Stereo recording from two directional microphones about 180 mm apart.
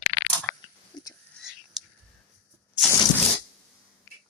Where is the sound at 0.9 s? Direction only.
25° left (ahead or behind).